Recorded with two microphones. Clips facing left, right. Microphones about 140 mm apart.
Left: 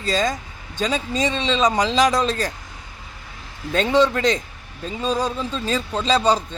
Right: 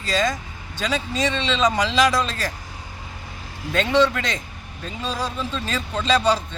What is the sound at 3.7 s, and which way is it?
Speech, 35° left (ahead or behind).